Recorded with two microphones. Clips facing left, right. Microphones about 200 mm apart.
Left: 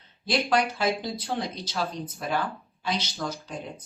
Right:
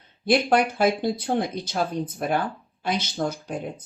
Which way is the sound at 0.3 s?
55° right (ahead or behind).